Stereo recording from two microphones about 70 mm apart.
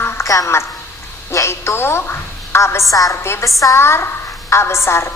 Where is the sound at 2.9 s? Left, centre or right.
Left.